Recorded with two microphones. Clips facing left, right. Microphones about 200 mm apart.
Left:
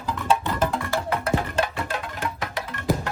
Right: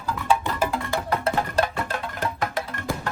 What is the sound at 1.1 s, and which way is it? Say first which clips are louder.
Music: right 2 dB; 45° right (ahead or behind).